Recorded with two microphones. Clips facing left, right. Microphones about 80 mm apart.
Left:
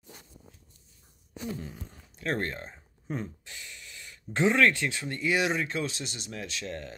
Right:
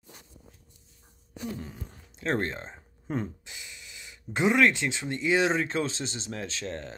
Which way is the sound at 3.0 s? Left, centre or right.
Right.